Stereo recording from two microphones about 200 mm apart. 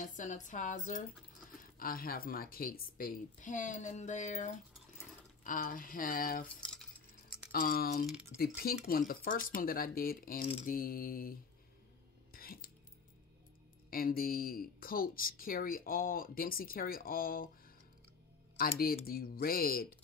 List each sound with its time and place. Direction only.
0.0 s speech: 40° left (ahead or behind)
6.6 s cutlery: 5° left (ahead or behind)
7.2 s speech: 50° left (ahead or behind)
8.1 s speech: 5° right (ahead or behind)
8.4 s speech: 50° left (ahead or behind)
12.3 s a sound: 45° left (ahead or behind)
13.8 s speech: 45° left (ahead or behind)
18.6 s speech: 50° left (ahead or behind)